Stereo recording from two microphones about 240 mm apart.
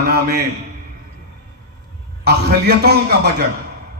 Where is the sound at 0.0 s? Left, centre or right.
Right.